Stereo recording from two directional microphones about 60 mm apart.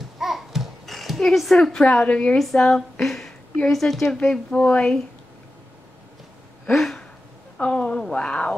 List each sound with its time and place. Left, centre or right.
0.2 s babbling: centre
2.0 s a woman's voice: left
2.3 s a woman's voice: centre
6.6 s a sound: centre
8.1 s speech: centre